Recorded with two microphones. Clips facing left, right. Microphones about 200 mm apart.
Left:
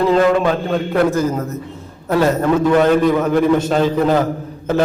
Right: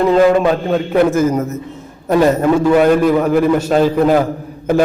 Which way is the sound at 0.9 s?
20° right (ahead or behind).